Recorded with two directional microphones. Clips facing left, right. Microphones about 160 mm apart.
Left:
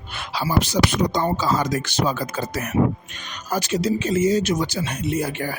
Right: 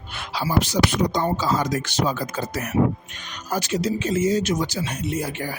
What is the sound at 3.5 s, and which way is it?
Speech, 90° left.